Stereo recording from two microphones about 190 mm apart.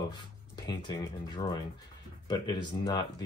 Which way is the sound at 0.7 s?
25° left (ahead or behind).